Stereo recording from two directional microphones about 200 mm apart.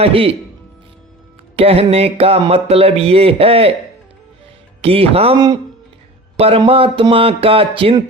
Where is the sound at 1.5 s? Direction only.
30° right (ahead or behind).